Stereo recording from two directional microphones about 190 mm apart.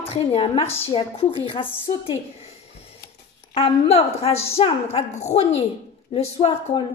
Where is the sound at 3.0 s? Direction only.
50° left (ahead or behind).